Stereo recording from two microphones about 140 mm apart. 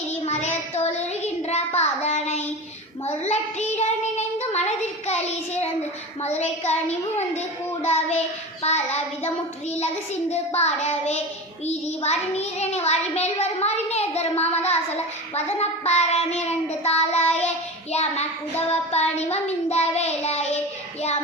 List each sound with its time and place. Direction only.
0.3 s child singing: 50° left (ahead or behind)
15.5 s child singing: 50° left (ahead or behind)